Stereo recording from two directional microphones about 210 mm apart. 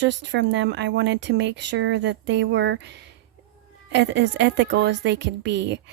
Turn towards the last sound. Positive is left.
turn(degrees=-55)  # may be behind; listen again after turning